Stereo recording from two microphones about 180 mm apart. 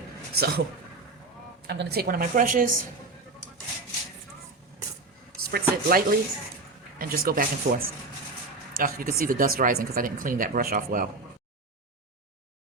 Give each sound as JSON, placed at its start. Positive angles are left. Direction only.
{"t": 0.3, "sound": "speech", "side_deg": -60}
{"t": 1.6, "sound": "speech", "side_deg": -65}
{"t": 5.4, "sound": "speech", "side_deg": -60}